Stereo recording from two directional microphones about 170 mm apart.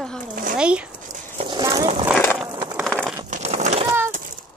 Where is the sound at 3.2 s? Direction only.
45° right (ahead or behind).